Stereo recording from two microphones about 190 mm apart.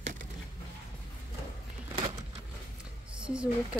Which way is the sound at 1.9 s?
30° right (ahead or behind).